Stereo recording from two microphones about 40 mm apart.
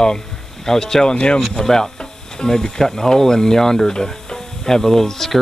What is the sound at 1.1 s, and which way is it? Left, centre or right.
Speech, left.